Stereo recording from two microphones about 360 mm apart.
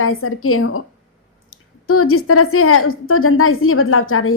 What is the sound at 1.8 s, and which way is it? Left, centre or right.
A woman's voice, left.